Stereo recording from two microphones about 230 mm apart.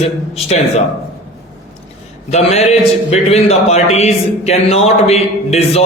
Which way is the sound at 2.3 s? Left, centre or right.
Left.